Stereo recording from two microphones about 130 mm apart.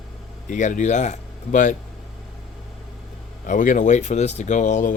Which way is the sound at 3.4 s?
80° left.